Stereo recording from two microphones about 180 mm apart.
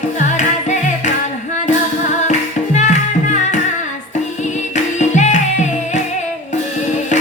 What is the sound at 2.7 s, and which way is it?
Music, 40° left (ahead or behind).